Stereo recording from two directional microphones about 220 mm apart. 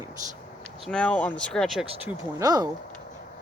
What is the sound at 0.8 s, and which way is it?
Speech, 5° left (ahead or behind).